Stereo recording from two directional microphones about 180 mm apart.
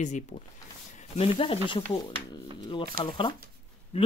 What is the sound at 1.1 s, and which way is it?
Speech, 30° left (ahead or behind).